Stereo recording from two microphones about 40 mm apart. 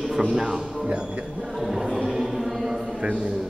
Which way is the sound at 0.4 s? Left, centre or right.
Centre.